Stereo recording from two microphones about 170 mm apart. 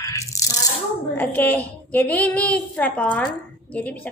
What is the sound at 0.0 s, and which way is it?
Rattle, 20° left (ahead or behind).